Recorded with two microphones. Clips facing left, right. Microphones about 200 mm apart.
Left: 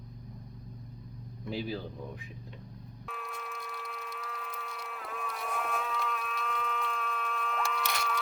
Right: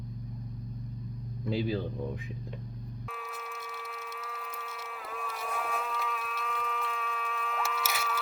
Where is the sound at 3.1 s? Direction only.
Centre (ahead or behind).